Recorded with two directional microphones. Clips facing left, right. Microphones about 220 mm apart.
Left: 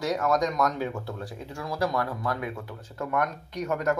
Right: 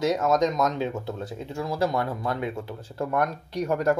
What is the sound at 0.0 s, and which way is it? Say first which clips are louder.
Speech: right 3 dB; 20° right (ahead or behind).